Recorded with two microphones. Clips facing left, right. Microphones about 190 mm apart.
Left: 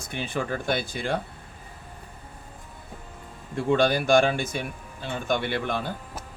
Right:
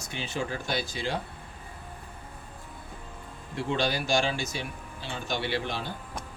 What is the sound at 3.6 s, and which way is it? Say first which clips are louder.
A man's voice: left 7 dB; 50° left (ahead or behind).